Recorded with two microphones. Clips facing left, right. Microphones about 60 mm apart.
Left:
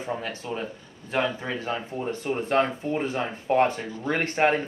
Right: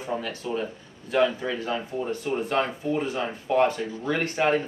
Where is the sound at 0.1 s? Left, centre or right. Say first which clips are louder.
Right 3 dB; left.